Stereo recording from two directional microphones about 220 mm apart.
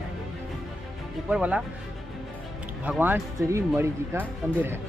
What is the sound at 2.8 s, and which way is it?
Speech, 10° right (ahead or behind).